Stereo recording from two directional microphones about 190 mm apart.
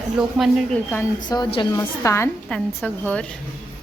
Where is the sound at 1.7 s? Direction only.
15° left (ahead or behind).